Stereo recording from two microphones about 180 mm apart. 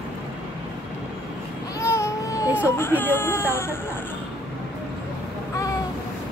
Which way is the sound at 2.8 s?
10° left (ahead or behind).